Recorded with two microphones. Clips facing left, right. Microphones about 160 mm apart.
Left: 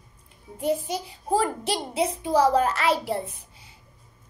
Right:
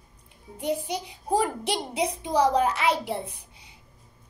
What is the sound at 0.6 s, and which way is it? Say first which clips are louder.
A child's voice: left 3 dB; 15° right (ahead or behind).